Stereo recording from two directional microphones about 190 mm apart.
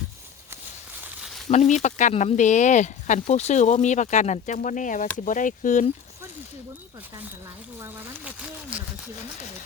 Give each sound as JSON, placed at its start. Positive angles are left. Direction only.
{"t": 1.0, "sound": "a sound", "side_deg": -5}
{"t": 1.5, "sound": "speech", "side_deg": 40}
{"t": 7.8, "sound": "speech", "side_deg": -10}